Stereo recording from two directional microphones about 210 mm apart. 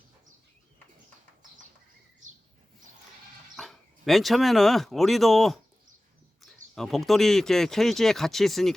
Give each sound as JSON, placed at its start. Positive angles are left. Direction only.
{"t": 2.2, "sound": "chirp", "side_deg": -35}
{"t": 3.5, "sound": "speech", "side_deg": 0}